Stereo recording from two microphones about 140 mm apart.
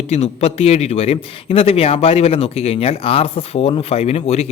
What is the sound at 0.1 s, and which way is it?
A man's voice, 50° left (ahead or behind).